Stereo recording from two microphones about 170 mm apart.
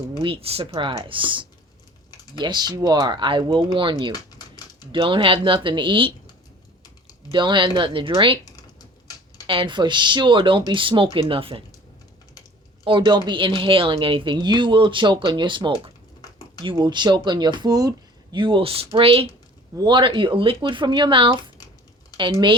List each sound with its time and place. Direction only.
0.2 s a woman's voice: 35° right (ahead or behind)
4.1 s typing: 25° left (ahead or behind)
4.9 s a woman's voice: 30° right (ahead or behind)
7.3 s a woman's voice: 30° right (ahead or behind)
9.5 s a woman's voice: 30° right (ahead or behind)
12.8 s a woman's voice: 25° right (ahead or behind)